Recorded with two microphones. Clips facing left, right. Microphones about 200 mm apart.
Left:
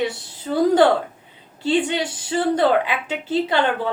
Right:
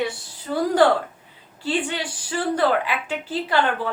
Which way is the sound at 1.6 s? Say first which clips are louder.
Left 5 dB; 25° left (ahead or behind).